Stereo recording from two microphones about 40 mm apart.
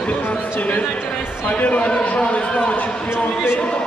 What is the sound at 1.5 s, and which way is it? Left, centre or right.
A man's voice, left.